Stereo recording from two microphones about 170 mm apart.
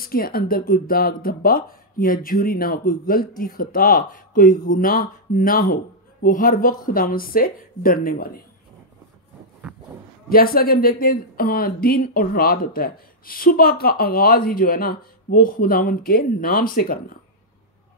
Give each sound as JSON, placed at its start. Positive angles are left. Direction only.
{"t": 0.0, "sound": "speech", "side_deg": 60}
{"t": 10.3, "sound": "speech", "side_deg": 60}